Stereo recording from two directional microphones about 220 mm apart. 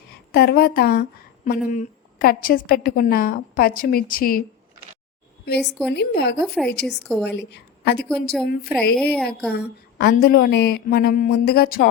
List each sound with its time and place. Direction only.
0.1 s a woman's voice: 45° left (ahead or behind)
5.6 s a woman's voice: centre (ahead or behind)
5.9 s speech: 50° left (ahead or behind)
6.4 s a woman's voice: centre (ahead or behind)
9.5 s speech: 45° left (ahead or behind)